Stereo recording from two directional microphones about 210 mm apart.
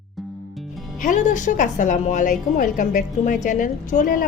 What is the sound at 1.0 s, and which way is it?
A woman's voice, 35° left (ahead or behind).